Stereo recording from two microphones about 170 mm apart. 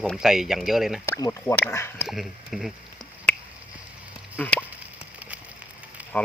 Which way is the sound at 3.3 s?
10° left (ahead or behind).